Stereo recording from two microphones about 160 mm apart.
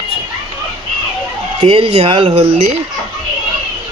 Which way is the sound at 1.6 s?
40° right (ahead or behind).